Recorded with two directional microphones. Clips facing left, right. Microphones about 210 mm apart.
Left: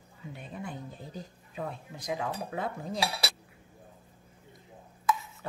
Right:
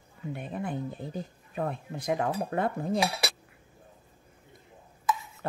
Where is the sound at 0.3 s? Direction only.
55° right (ahead or behind).